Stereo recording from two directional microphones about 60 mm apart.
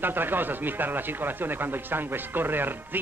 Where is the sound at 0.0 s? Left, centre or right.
Right.